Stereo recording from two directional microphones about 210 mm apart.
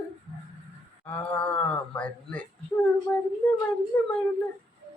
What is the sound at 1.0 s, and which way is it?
Speech, 5° left (ahead or behind).